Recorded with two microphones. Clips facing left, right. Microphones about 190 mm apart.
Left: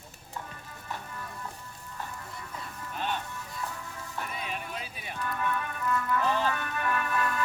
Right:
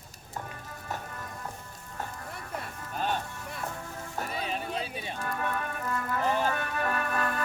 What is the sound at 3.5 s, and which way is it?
Music, 55° right (ahead or behind).